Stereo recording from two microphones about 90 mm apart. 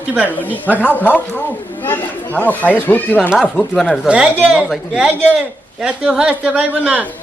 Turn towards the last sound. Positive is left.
turn(degrees=-15)  # may be behind; listen again after turning